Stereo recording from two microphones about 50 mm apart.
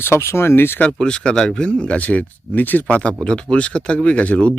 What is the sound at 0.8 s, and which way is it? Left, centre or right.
Speech, left.